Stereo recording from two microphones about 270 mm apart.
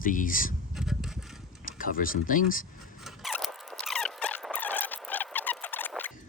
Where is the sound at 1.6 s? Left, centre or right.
Left.